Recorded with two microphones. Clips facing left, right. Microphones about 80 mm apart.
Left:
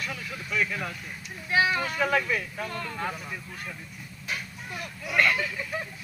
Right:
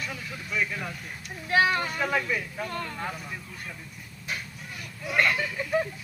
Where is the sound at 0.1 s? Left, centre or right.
Centre.